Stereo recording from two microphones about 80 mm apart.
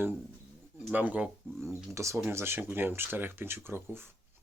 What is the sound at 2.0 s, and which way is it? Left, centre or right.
Speech, right.